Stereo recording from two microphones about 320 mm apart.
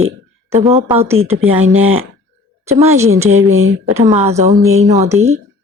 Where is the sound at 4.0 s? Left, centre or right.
Right.